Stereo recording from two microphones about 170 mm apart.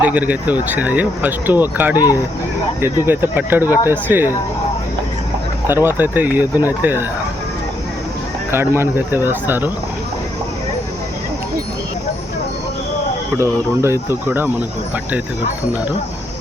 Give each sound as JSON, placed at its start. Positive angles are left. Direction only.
{"t": 0.0, "sound": "speech", "side_deg": -10}
{"t": 2.0, "sound": "speech", "side_deg": 20}
{"t": 3.1, "sound": "speech", "side_deg": -10}
{"t": 5.6, "sound": "speech", "side_deg": -15}
{"t": 8.4, "sound": "speech", "side_deg": -15}
{"t": 13.3, "sound": "speech", "side_deg": -15}